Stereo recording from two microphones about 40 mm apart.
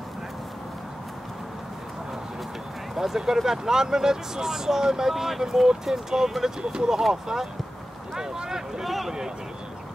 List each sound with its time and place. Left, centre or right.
2.9 s speech: centre
7.0 s speech: centre
8.8 s speech: centre